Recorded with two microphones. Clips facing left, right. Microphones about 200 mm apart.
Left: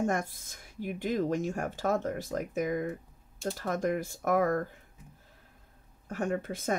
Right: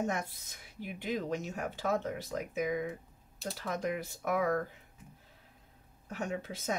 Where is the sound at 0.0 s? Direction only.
50° left (ahead or behind).